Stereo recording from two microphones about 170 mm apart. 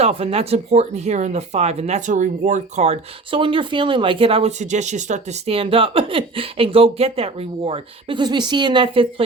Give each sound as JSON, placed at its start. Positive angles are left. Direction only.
{"t": 0.0, "sound": "speech", "side_deg": -35}